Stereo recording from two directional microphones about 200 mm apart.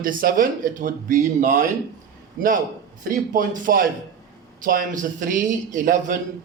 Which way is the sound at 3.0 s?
45° right (ahead or behind).